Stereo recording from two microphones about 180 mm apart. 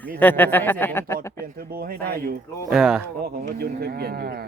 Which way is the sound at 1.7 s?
55° right (ahead or behind).